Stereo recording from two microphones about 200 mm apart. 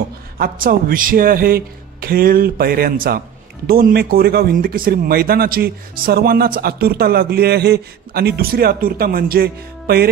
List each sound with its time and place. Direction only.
0.4 s speech: 45° right (ahead or behind)